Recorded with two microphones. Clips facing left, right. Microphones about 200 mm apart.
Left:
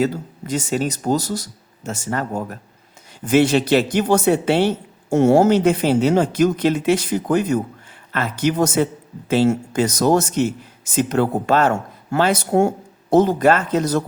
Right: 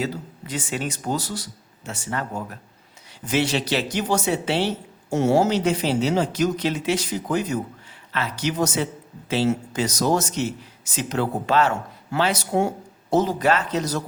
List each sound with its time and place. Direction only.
0.0 s speech: 45° left (ahead or behind)